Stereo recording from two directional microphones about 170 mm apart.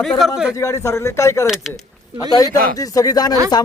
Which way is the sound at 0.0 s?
Centre (ahead or behind).